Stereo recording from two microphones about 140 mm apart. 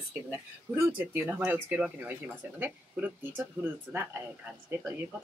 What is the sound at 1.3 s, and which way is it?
Speech, 10° right (ahead or behind).